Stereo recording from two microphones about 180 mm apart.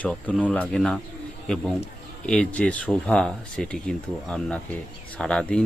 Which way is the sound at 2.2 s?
5° left (ahead or behind).